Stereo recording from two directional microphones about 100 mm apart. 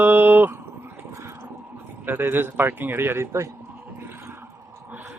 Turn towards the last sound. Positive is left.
turn(degrees=-30)  # may be behind; listen again after turning